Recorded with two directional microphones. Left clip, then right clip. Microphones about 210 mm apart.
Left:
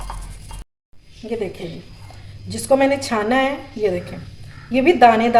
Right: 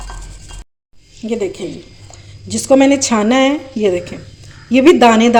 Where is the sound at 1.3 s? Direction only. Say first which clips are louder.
Right 6 dB; 40° right (ahead or behind).